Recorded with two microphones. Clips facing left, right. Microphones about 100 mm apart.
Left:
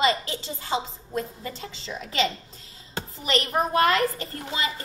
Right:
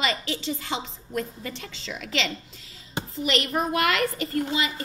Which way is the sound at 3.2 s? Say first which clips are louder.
Left 1 dB; 30° left (ahead or behind).